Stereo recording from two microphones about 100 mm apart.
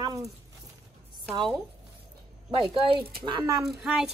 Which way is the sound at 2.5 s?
65° right (ahead or behind).